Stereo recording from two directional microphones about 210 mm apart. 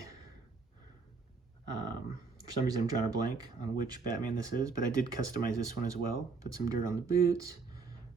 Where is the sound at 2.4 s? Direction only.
15° right (ahead or behind).